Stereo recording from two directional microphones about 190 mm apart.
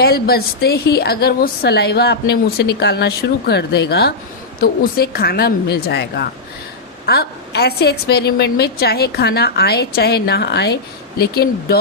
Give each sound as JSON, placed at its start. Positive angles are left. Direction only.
{"t": 0.0, "sound": "a woman's voice", "side_deg": 55}